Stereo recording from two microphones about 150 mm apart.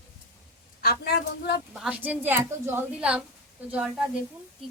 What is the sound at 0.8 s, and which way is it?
Speech, 90° left.